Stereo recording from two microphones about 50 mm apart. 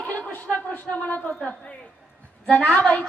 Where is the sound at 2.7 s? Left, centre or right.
Left.